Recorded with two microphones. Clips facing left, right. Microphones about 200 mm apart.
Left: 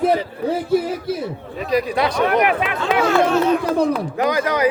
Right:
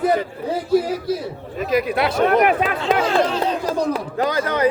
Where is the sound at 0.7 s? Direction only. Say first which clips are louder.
Right 4 dB; 55° left (ahead or behind).